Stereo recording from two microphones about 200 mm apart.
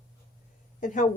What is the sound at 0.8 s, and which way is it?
Speech, 40° left (ahead or behind).